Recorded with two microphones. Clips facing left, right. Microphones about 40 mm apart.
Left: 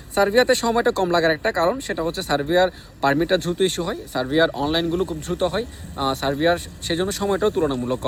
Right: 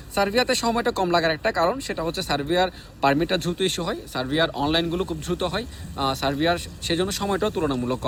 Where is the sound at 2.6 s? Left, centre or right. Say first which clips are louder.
Left 2 dB; right.